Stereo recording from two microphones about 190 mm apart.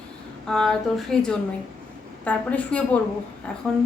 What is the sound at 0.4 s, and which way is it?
A woman's voice, 5° left (ahead or behind).